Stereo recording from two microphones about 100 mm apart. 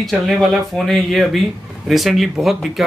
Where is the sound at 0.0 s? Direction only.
Centre (ahead or behind).